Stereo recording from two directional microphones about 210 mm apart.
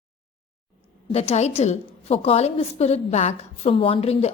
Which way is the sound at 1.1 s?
30° left (ahead or behind).